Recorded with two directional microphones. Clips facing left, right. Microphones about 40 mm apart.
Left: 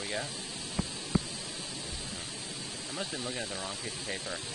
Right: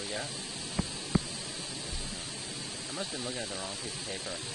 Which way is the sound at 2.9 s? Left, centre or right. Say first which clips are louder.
Left 1 dB; centre.